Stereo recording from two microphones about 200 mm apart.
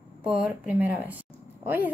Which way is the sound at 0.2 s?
5° right (ahead or behind).